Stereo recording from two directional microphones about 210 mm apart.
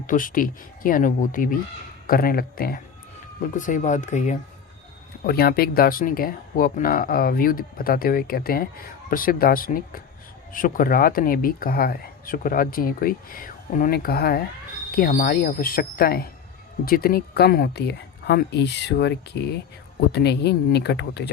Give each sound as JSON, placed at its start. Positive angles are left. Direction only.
{"t": 0.1, "sound": "speech", "side_deg": 40}
{"t": 5.2, "sound": "speech", "side_deg": 45}